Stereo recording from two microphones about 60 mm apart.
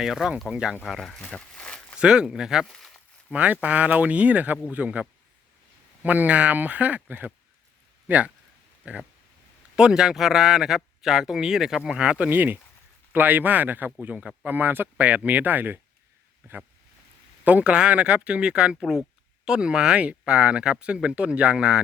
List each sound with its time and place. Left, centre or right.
0.0 s speech: centre
0.9 s speech: centre
1.2 s walk: centre
2.0 s speech: centre
2.6 s a sound: centre
3.3 s speech: right
12.3 s speech: right
17.4 s speech: right